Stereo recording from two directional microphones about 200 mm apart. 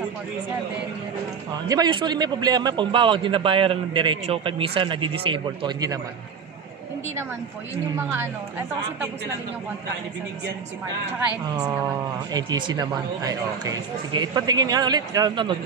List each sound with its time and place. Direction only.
1.7 s a man's voice: 20° right (ahead or behind)
8.1 s a woman's voice: 10° right (ahead or behind)
11.5 s a man's voice: 10° right (ahead or behind)